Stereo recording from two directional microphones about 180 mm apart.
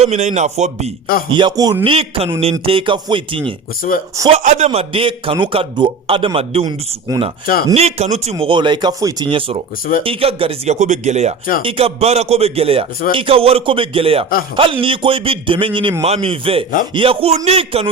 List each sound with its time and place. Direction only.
0.0 s a man's voice: 40° right (ahead or behind)
1.3 s a man's voice: 25° right (ahead or behind)
4.3 s a man's voice: 40° right (ahead or behind)
7.1 s speech: 20° right (ahead or behind)
7.7 s a man's voice: 35° right (ahead or behind)